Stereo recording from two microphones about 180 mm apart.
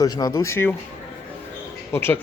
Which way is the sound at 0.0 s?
20° left (ahead or behind).